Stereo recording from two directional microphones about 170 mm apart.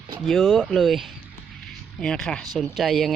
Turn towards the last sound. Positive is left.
turn(degrees=0)  # may be behind; listen again after turning